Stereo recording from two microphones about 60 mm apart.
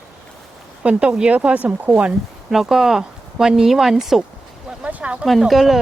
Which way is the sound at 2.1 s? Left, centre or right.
Centre.